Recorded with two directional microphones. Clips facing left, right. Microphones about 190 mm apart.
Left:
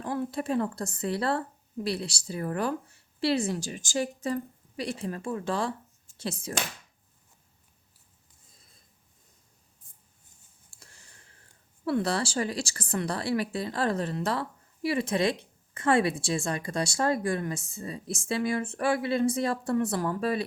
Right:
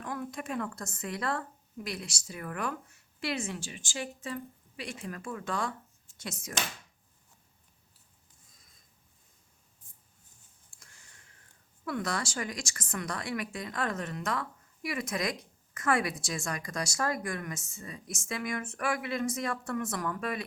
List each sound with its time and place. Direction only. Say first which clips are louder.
0.0 s speech: left 6 dB; 30° left (ahead or behind)
10.7 s a sound: left 4 dB; 35° left (ahead or behind)
11.9 s speech: left 6 dB; 30° left (ahead or behind)